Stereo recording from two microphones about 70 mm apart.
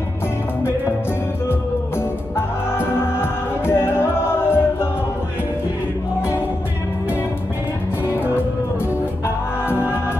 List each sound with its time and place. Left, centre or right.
2.3 s music: left
9.7 s music: left